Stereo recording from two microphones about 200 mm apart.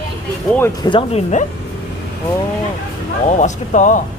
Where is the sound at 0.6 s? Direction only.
20° left (ahead or behind).